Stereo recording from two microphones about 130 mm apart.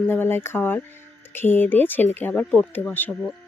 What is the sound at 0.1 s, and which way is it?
Speech, 15° left (ahead or behind).